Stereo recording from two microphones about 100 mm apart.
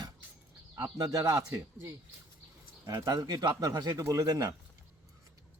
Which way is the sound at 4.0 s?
30° right (ahead or behind).